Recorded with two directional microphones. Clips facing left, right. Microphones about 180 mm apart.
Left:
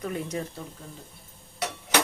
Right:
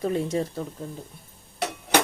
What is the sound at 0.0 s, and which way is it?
Speech, 30° right (ahead or behind).